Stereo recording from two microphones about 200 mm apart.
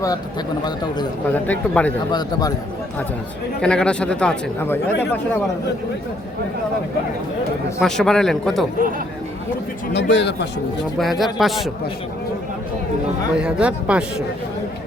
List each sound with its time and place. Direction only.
0.6 s speech: 20° left (ahead or behind)
1.3 s speech: 10° left (ahead or behind)
3.6 s speech: 5° left (ahead or behind)
7.8 s speech: centre (ahead or behind)
9.9 s speech: 60° left (ahead or behind)
10.9 s speech: centre (ahead or behind)
13.3 s speech: 5° right (ahead or behind)